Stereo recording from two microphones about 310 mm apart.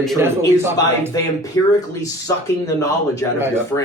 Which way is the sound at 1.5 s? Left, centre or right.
Centre.